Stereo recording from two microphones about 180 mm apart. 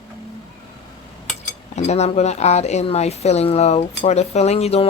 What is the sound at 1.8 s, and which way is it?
Speech, 40° left (ahead or behind).